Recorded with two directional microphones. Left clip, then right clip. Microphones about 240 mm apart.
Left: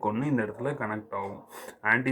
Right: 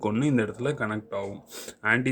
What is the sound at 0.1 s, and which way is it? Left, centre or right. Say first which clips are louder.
Speech: right 3 dB; right.